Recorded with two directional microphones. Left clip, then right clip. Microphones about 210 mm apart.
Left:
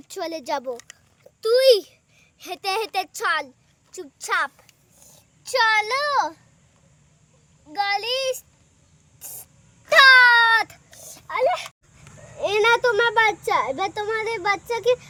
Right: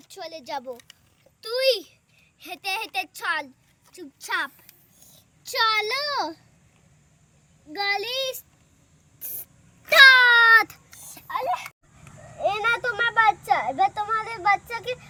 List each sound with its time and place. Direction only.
0.1 s a child's voice: 55° left (ahead or behind)
7.7 s a child's voice: 45° left (ahead or behind)
9.2 s spray: 45° left (ahead or behind)
9.9 s a sound: 40° left (ahead or behind)
10.5 s a sound: 20° left (ahead or behind)
11.3 s a child's voice: 55° left (ahead or behind)